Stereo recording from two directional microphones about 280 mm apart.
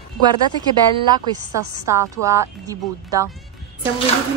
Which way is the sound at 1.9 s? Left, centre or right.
Centre.